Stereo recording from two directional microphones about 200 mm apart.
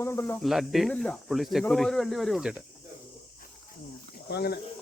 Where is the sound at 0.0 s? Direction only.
15° left (ahead or behind).